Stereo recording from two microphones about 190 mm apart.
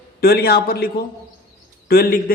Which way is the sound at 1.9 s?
55° left (ahead or behind).